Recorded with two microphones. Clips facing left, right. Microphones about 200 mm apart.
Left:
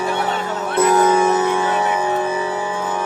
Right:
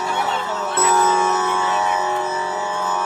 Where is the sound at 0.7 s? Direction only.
15° left (ahead or behind).